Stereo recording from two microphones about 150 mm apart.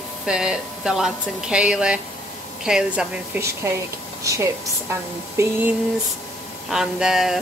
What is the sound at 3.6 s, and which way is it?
A woman's voice, 20° right (ahead or behind).